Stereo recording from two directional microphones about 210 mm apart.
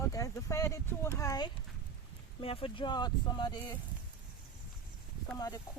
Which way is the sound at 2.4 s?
25° left (ahead or behind).